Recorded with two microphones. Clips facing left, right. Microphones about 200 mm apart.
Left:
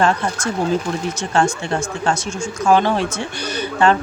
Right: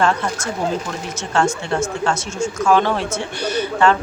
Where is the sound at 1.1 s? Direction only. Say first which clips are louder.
Right 1 dB; 15° left (ahead or behind).